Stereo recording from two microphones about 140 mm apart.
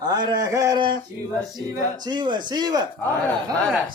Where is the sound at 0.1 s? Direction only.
30° right (ahead or behind).